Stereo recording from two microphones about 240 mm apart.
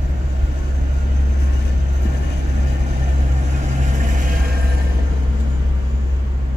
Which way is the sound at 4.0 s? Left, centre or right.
Right.